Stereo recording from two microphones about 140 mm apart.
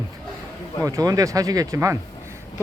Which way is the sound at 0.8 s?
25° right (ahead or behind).